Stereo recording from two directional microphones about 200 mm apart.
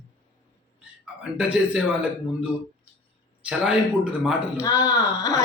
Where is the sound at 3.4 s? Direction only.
5° right (ahead or behind).